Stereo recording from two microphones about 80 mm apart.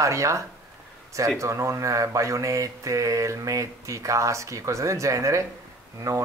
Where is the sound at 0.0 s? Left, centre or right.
Right.